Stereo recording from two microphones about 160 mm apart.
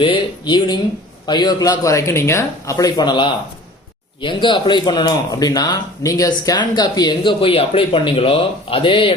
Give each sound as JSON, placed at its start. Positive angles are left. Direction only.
{"t": 0.0, "sound": "speech", "side_deg": 30}